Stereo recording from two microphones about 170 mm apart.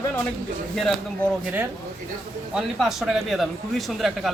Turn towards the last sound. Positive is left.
turn(degrees=0)  # may be behind; listen again after turning